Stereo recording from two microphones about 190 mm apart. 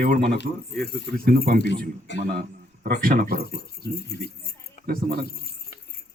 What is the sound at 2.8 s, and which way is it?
Speech, 50° right (ahead or behind).